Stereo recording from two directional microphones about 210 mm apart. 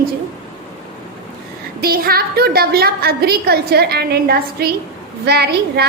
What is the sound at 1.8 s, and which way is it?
A woman's voice, 45° right (ahead or behind).